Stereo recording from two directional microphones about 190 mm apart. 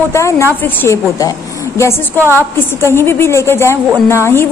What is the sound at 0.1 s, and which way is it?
A woman's voice, 15° left (ahead or behind).